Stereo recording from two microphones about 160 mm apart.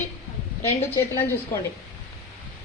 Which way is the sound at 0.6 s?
15° left (ahead or behind).